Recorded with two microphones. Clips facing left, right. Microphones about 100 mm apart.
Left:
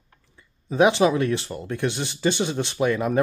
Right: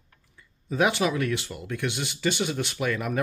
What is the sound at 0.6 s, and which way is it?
Speech, 25° left (ahead or behind).